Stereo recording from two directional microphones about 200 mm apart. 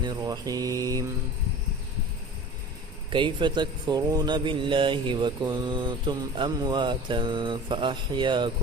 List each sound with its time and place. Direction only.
0.0 s mantra: 20° right (ahead or behind)
3.1 s speech: 25° right (ahead or behind)